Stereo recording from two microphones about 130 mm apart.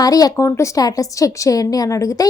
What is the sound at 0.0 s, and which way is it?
A woman's voice, 30° left (ahead or behind).